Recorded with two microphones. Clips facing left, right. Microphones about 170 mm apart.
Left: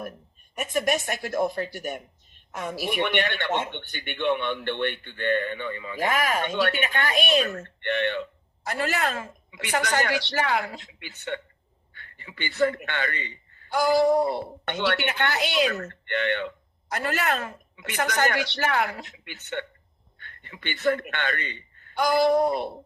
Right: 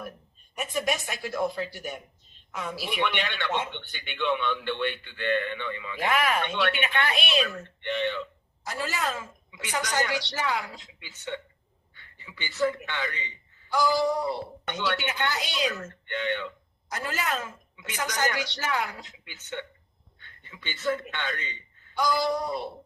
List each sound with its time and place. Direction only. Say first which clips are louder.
0.5 s a man's voice: left 4 dB; 55° left (ahead or behind)